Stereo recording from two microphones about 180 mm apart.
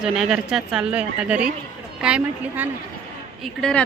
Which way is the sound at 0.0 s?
5° right (ahead or behind).